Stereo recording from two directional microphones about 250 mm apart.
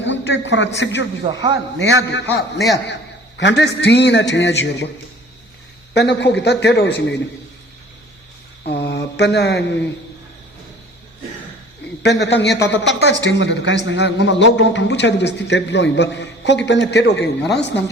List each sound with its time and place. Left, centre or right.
0.0 s a sound: left
0.8 s a man's voice: left
1.2 s a man's voice: centre
2.8 s a man's voice: left
5.9 s a man's voice: left
8.6 s mantra: left
12.0 s a man's voice: left